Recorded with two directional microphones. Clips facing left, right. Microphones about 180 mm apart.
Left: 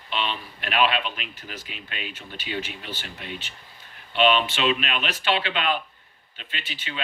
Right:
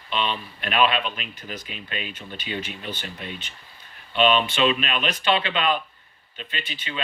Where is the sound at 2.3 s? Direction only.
5° left (ahead or behind).